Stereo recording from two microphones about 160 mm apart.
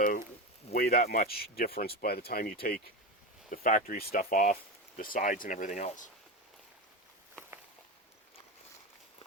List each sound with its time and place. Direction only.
0.7 s speech: 70° left (ahead or behind); by 6.1 s 50° left (ahead or behind)